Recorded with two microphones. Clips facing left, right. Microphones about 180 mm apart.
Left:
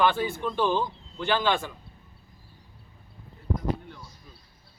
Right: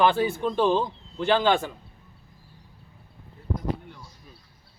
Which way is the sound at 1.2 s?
30° right (ahead or behind).